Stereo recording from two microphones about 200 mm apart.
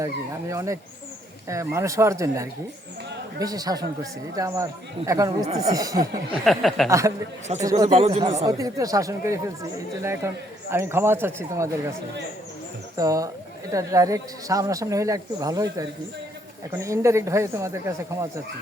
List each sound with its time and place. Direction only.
0.0 s speech: 15° right (ahead or behind)
5.5 s speech: 30° right (ahead or behind)
5.7 s speech: 20° right (ahead or behind)
6.4 s a sound: centre (ahead or behind)
7.6 s speech: 15° right (ahead or behind)
7.9 s speech: 30° right (ahead or behind)
8.4 s speech: 15° right (ahead or behind)
13.0 s speech: 15° right (ahead or behind)